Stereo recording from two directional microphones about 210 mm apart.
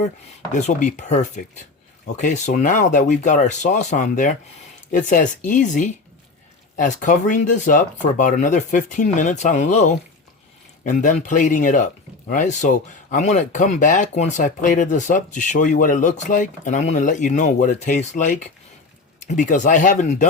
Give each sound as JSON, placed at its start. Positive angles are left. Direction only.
{"t": 0.5, "sound": "speech", "side_deg": 35}